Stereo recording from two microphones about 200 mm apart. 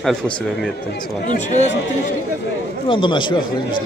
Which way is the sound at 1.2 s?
35° left (ahead or behind).